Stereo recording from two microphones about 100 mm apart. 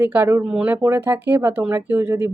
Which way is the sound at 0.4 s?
10° right (ahead or behind).